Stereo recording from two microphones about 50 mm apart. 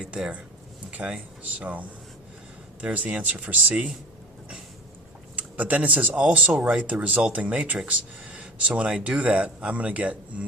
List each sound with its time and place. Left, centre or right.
0.9 s a sound: right
1.5 s speech: right
2.8 s speech: right
5.4 s speech: right